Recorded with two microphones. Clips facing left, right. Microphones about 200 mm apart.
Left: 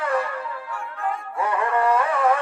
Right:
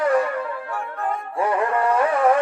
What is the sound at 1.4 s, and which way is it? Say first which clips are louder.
Music: right 2 dB; 30° right (ahead or behind).